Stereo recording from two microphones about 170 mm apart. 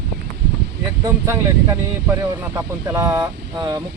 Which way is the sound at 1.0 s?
15° right (ahead or behind).